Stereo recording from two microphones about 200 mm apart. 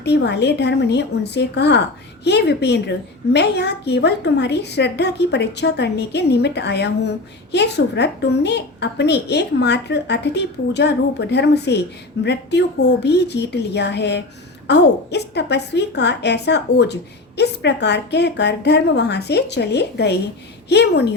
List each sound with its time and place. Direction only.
0.0 s a woman's voice: 60° left (ahead or behind)